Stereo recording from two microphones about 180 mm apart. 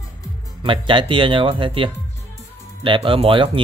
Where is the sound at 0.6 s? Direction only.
25° right (ahead or behind).